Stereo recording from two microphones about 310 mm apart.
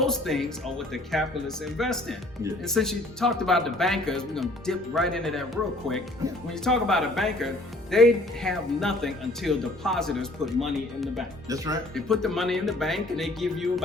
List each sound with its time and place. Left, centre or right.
0.0 s speech: centre
6.5 s speech: centre
11.4 s speech: centre
11.9 s speech: centre